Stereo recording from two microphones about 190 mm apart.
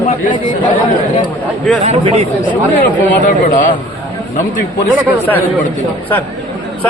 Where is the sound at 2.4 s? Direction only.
45° left (ahead or behind).